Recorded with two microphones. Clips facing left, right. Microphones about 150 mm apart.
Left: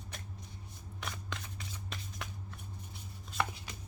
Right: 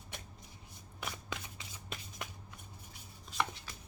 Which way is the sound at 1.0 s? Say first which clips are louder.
Right 1 dB; 5° right (ahead or behind).